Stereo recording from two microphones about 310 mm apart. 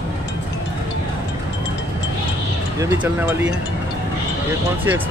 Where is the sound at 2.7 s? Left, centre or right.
Centre.